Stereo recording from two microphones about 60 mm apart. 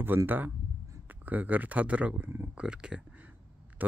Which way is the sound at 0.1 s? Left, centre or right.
Right.